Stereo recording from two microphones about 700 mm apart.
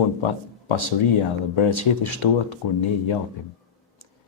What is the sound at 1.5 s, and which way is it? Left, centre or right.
Speech, left.